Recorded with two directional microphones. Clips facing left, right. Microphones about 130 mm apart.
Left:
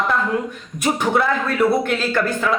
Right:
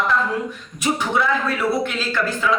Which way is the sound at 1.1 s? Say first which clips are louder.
Left 2 dB; 50° left (ahead or behind).